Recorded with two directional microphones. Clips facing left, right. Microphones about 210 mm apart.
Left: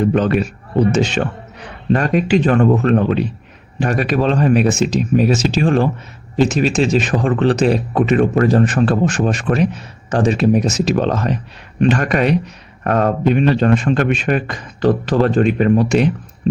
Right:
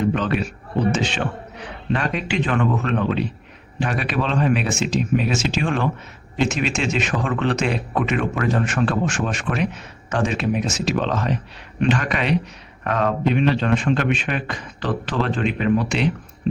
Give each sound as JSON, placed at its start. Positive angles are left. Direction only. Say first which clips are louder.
{"t": 0.0, "sound": "a man's voice", "louder": "left 6 dB", "side_deg": 45}